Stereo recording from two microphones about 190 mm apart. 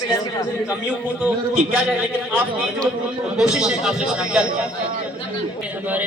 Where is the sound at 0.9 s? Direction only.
5° right (ahead or behind).